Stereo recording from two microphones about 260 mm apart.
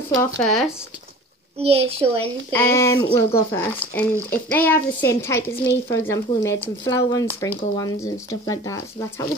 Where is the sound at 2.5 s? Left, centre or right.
Centre.